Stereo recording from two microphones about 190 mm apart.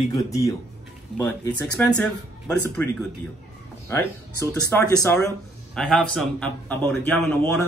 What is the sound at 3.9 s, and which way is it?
A man's voice, 10° left (ahead or behind).